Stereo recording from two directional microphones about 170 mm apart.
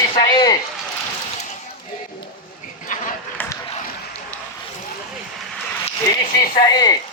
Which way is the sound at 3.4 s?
10° left (ahead or behind).